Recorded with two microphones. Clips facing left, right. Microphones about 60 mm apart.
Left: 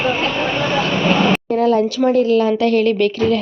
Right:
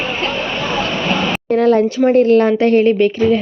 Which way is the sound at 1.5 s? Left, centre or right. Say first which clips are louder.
Right 6 dB; right.